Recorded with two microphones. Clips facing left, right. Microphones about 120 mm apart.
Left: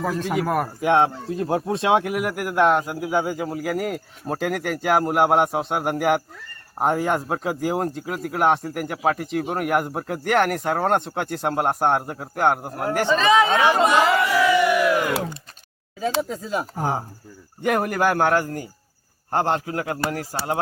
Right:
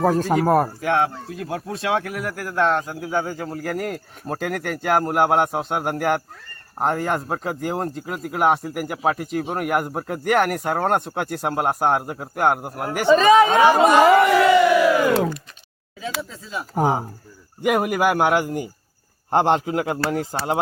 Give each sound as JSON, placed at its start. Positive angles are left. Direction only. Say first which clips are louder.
{"t": 0.0, "sound": "speech", "louder": "right 5 dB", "side_deg": -40}
{"t": 0.8, "sound": "speech", "louder": "left 2 dB", "side_deg": 20}
{"t": 13.1, "sound": "speech", "louder": "right 5 dB", "side_deg": -40}
{"t": 14.2, "sound": "music", "louder": "right 4 dB", "side_deg": -65}
{"t": 16.3, "sound": "speech", "louder": "left 6 dB", "side_deg": 50}
{"t": 17.6, "sound": "a man's voice", "louder": "right 2 dB", "side_deg": -10}